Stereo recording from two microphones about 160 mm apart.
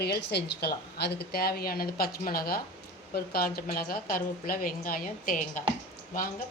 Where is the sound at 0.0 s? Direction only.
90° left.